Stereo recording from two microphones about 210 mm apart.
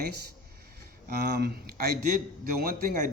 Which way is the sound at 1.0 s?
50° right (ahead or behind).